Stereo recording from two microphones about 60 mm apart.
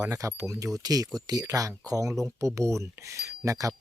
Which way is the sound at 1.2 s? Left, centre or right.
Right.